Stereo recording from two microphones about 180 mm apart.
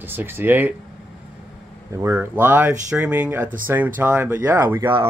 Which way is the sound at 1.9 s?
15° right (ahead or behind).